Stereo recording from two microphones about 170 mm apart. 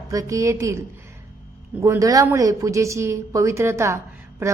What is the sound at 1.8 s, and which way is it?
A woman's voice, 20° right (ahead or behind).